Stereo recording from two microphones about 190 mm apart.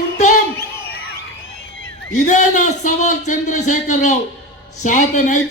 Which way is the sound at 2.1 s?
40° left (ahead or behind).